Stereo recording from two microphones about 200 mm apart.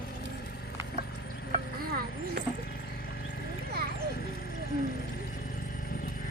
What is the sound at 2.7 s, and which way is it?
Clip-clop, 45° left (ahead or behind).